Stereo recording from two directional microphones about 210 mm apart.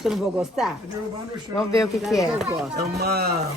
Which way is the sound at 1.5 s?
15° left (ahead or behind).